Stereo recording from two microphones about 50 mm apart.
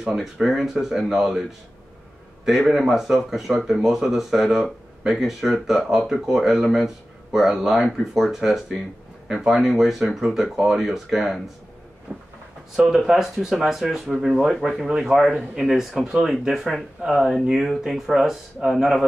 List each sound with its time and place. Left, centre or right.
0.2 s speech: centre
2.4 s speech: centre
12.1 s a sound: right
12.7 s speech: centre